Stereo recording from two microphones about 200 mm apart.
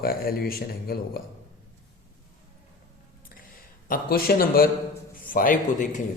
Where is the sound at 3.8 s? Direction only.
45° left (ahead or behind).